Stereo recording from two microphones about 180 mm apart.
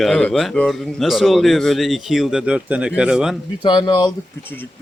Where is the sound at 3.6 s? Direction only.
25° left (ahead or behind).